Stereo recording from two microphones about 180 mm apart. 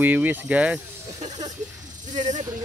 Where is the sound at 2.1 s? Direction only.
40° right (ahead or behind).